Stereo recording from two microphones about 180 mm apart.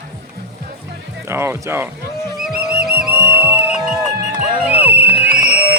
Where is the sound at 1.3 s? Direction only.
15° right (ahead or behind).